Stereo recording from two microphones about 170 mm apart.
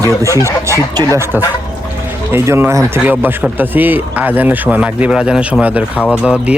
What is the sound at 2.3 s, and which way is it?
Speech, 15° right (ahead or behind).